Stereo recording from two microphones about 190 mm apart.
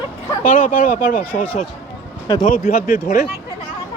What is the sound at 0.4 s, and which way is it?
Speech, 45° left (ahead or behind).